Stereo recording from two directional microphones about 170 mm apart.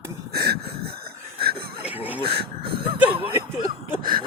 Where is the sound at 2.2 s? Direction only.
65° right (ahead or behind).